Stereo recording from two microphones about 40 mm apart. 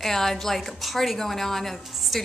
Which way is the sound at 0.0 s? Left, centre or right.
Centre.